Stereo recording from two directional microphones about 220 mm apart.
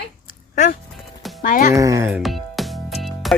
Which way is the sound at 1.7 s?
15° right (ahead or behind).